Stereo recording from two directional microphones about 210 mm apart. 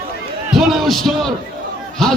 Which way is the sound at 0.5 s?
Centre (ahead or behind).